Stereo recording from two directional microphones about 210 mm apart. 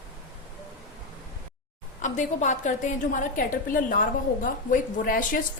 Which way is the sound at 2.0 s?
35° left (ahead or behind).